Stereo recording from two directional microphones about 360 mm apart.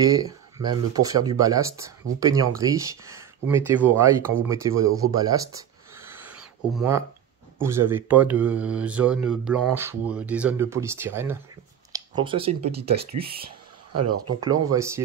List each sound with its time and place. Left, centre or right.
0.0 s speech: centre
5.1 s a sound: centre
7.5 s speech: centre
11.9 s a sound: centre
12.7 s speech: right
13.9 s speech: right
14.4 s speech: centre